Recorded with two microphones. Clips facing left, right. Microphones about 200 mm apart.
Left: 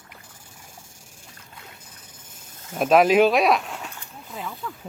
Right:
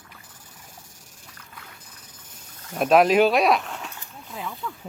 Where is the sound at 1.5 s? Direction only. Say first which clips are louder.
Left 1 dB; 25° left (ahead or behind).